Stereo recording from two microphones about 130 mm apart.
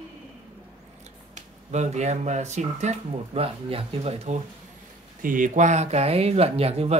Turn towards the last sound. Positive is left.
turn(degrees=-50)  # may be behind; listen again after turning